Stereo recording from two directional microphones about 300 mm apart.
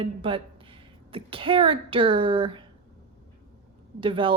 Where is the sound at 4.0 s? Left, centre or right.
Centre.